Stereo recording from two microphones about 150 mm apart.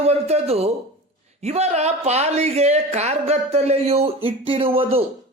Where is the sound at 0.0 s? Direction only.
45° right (ahead or behind).